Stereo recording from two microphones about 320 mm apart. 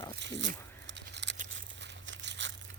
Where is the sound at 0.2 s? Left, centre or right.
Right.